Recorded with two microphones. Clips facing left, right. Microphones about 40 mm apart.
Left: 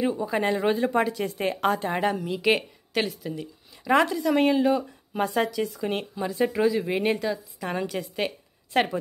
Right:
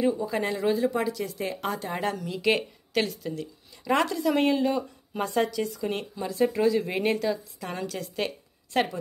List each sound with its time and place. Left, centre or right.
0.1 s speech: left
2.0 s speech: centre
5.7 s speech: left
7.6 s speech: centre